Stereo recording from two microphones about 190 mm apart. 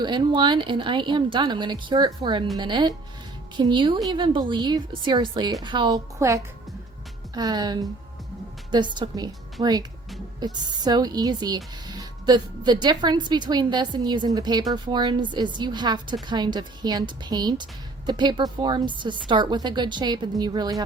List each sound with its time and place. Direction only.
0.0 s speech: 25° right (ahead or behind)